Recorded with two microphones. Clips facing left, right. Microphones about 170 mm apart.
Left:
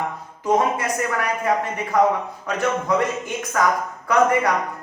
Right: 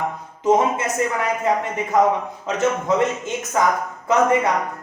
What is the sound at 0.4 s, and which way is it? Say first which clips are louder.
A man's voice: right 2 dB; 20° right (ahead or behind).